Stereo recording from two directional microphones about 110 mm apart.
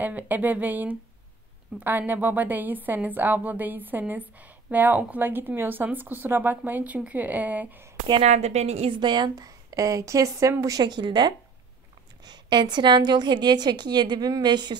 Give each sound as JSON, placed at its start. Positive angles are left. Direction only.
{"t": 0.0, "sound": "a woman's voice", "side_deg": -15}
{"t": 8.2, "sound": "a woman's voice", "side_deg": -85}
{"t": 8.9, "sound": "a woman's voice", "side_deg": -40}